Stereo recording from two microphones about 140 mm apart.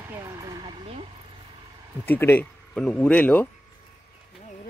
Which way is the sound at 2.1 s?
15° left (ahead or behind).